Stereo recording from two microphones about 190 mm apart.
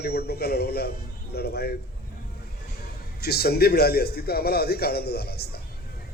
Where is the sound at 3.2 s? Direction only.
55° left (ahead or behind).